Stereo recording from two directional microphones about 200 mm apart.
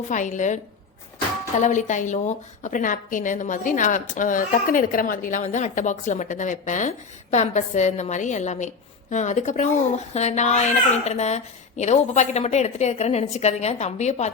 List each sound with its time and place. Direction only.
0.1 s a woman's voice: 40° left (ahead or behind)